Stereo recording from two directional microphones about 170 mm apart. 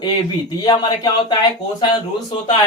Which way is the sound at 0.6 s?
25° left (ahead or behind).